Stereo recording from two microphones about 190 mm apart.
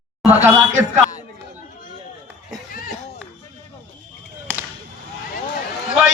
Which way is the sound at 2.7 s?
50° left (ahead or behind).